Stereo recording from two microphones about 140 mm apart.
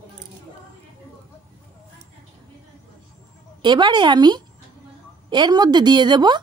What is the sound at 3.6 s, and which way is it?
A woman's voice, 35° right (ahead or behind).